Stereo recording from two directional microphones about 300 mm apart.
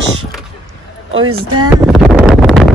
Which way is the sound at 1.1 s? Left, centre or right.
Right.